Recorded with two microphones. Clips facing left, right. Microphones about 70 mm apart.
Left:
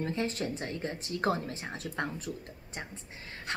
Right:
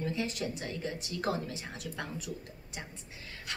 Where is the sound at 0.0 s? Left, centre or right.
Left.